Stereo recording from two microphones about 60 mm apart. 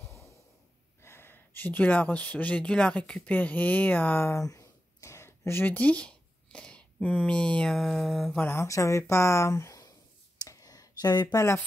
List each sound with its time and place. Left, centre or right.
1.0 s speech: left; by 3.2 s centre
3.3 s speech: left
4.3 s a sound: left
5.7 s speech: left
7.7 s a sound: centre
8.3 s speech: left
8.6 s speech: left
10.4 s a sound: left
11.3 s speech: left